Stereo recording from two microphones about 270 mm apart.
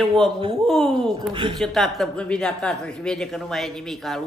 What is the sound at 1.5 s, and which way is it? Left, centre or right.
Speech, centre.